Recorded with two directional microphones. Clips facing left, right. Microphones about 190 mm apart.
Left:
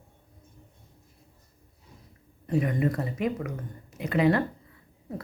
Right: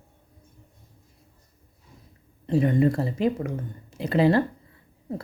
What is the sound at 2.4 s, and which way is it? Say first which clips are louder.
Speech: right 5 dB; 30° right (ahead or behind).